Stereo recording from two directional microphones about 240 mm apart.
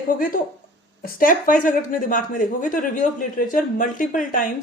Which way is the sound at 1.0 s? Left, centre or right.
Left.